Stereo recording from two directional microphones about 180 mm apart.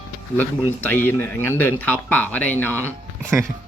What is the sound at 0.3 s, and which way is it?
Speech, 10° left (ahead or behind).